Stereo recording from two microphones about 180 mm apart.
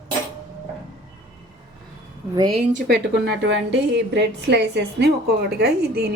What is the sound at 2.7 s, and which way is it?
A woman's voice, 60° right (ahead or behind).